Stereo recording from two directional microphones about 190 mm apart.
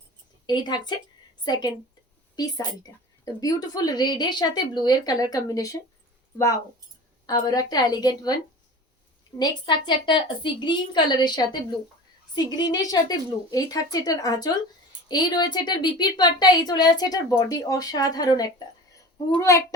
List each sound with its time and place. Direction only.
0.4 s a woman's voice: 20° left (ahead or behind)
7.3 s a woman's voice: 20° left (ahead or behind)
9.4 s a woman's voice: 25° left (ahead or behind)